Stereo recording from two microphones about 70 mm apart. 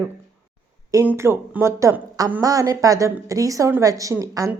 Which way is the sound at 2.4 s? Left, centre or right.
Right.